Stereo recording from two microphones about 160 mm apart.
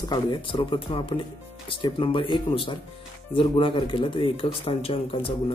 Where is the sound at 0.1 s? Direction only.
30° left (ahead or behind).